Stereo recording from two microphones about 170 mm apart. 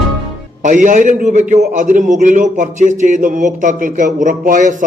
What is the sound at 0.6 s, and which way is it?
A man's voice, 50° right (ahead or behind).